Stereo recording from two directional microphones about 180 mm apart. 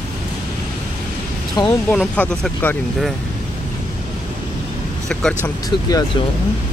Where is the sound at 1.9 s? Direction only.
5° left (ahead or behind).